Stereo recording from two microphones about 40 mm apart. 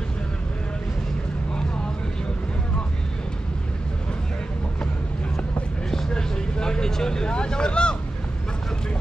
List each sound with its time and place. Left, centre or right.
5.9 s vehicle: centre